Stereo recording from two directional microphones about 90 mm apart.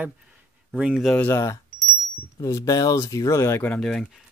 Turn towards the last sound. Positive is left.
turn(degrees=5)  # may be behind; listen again after turning